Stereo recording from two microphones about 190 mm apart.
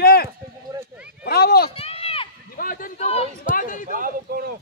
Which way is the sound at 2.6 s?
50° left (ahead or behind).